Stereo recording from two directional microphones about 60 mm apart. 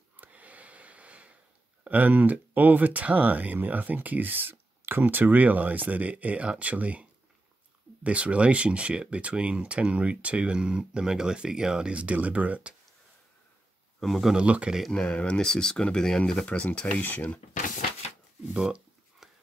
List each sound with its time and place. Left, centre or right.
0.2 s snort: right
1.9 s speech: right
13.9 s speech: centre
14.3 s speech: centre
14.9 s speech: centre
17.0 s speech: left
18.5 s speech: centre